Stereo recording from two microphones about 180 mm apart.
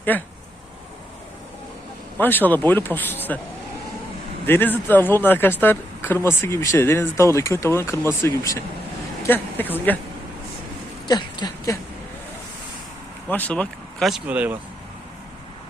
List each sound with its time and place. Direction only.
0.1 s speech: 10° left (ahead or behind)
2.1 s speech: 10° left (ahead or behind)
4.4 s speech: 10° left (ahead or behind)
11.1 s speech: 25° left (ahead or behind)
13.2 s speech: 10° left (ahead or behind); by 14.6 s 10° right (ahead or behind)